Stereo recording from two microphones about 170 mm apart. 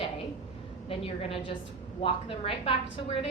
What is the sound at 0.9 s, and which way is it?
A woman's voice, 35° left (ahead or behind).